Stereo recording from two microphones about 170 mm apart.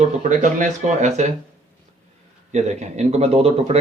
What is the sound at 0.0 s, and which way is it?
Speech, 50° right (ahead or behind).